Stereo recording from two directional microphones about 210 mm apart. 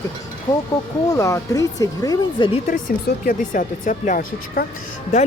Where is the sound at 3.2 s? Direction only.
40° left (ahead or behind).